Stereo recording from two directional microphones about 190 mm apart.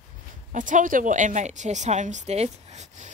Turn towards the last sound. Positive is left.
turn(degrees=-35)  # may be behind; listen again after turning